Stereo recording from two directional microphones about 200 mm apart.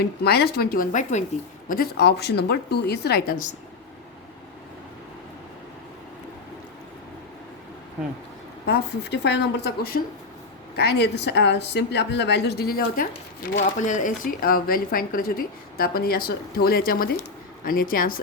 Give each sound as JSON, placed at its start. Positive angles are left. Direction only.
{"t": 0.0, "sound": "speech", "side_deg": 55}
{"t": 8.6, "sound": "a woman's voice", "side_deg": 55}